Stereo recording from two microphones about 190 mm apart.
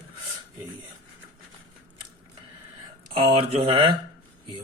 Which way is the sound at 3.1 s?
30° right (ahead or behind).